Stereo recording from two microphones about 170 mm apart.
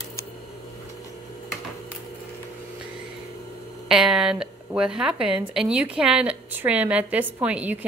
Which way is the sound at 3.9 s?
5° right (ahead or behind).